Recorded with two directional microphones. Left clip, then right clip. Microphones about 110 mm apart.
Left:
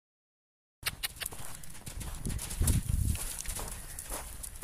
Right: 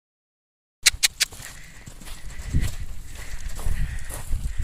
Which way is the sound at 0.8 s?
20° right (ahead or behind).